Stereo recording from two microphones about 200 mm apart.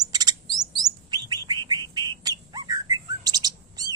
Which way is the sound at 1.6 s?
20° right (ahead or behind).